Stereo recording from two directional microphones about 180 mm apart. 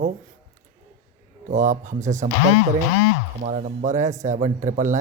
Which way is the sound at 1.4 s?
45° right (ahead or behind).